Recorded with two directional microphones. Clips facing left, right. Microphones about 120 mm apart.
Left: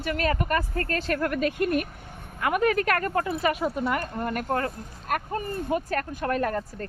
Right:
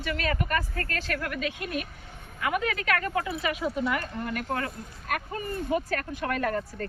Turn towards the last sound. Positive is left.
turn(degrees=40)  # may be behind; listen again after turning